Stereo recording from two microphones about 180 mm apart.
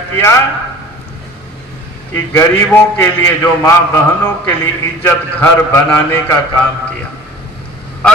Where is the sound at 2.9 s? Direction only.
10° left (ahead or behind).